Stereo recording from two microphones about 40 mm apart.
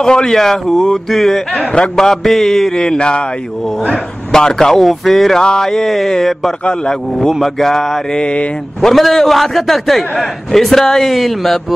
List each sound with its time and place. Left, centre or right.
0.0 s speech: centre
0.4 s a man's voice: centre
5.4 s speech: centre
6.6 s mantra: centre
7.4 s speech: centre
8.1 s mantra: left
8.8 s a man's voice: centre